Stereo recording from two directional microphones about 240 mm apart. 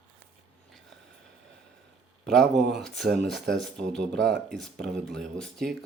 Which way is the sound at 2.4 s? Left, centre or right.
Right.